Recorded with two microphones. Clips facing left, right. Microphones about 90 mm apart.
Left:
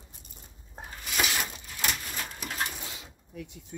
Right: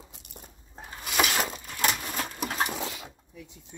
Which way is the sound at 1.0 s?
55° right (ahead or behind).